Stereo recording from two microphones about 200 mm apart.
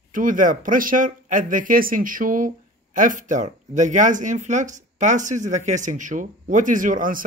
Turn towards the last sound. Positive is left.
turn(degrees=-45)  # may be behind; listen again after turning